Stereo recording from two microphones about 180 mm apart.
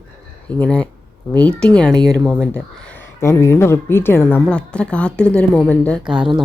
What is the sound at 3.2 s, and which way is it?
Speech, 15° left (ahead or behind).